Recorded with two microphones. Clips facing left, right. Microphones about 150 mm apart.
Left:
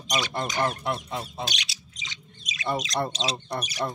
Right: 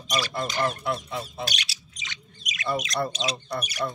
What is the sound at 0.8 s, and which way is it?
Fowl, 30° left (ahead or behind).